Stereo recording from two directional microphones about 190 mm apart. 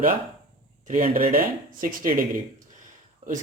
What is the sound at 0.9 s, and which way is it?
Speech, 45° right (ahead or behind).